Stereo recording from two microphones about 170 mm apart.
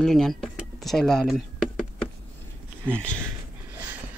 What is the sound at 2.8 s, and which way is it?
Speech, 5° left (ahead or behind).